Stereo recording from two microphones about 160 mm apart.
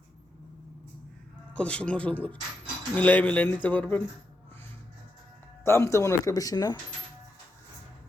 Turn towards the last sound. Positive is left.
turn(degrees=25)  # may be behind; listen again after turning